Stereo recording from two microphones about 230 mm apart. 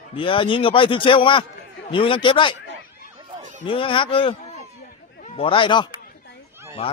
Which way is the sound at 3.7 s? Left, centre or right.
Left.